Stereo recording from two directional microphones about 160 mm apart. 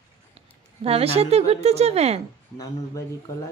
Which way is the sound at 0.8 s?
40° right (ahead or behind).